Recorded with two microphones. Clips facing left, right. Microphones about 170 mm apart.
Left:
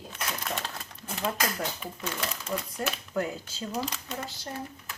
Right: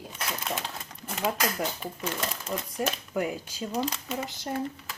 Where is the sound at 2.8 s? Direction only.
10° right (ahead or behind).